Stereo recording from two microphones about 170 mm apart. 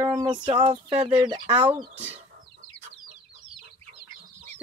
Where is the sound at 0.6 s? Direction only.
30° right (ahead or behind).